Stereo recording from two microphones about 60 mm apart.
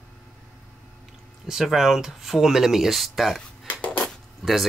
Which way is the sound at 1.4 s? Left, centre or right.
Centre.